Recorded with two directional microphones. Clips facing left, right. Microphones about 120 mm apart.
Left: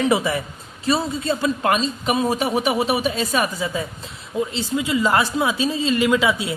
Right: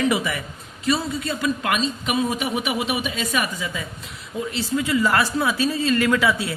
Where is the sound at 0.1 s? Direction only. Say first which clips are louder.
Left 4 dB; 30° left (ahead or behind).